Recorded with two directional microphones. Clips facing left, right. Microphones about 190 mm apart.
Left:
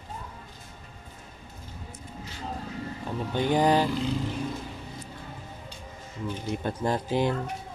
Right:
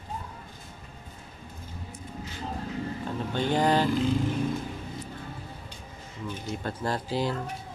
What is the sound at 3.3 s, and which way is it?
Vehicle, 15° left (ahead or behind).